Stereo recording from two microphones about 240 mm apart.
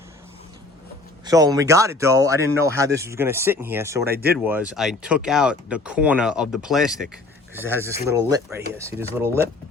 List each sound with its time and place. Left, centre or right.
1.2 s speech: centre
4.0 s speech: right
4.4 s speech: centre